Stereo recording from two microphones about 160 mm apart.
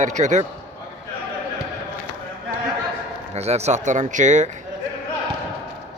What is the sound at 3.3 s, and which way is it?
Speech, 45° right (ahead or behind).